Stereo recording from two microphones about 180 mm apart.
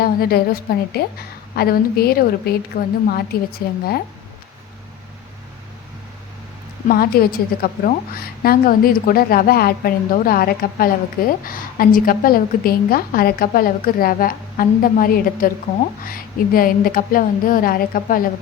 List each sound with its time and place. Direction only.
0.0 s a woman's voice: 55° left (ahead or behind)
6.8 s a woman's voice: 55° left (ahead or behind)